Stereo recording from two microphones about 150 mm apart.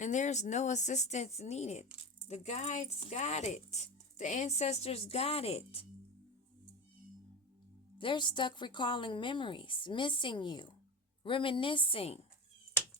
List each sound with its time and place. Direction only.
0.0 s speech: 55° left (ahead or behind)
7.9 s speech: 30° left (ahead or behind)